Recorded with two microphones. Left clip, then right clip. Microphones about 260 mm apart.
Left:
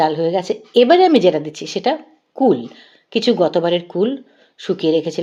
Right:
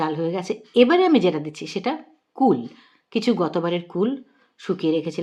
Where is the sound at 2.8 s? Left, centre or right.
Centre.